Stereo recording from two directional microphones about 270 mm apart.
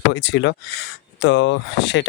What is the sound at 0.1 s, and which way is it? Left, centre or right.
Speech, left.